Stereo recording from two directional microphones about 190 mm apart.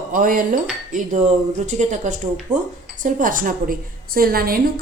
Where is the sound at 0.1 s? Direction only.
45° right (ahead or behind).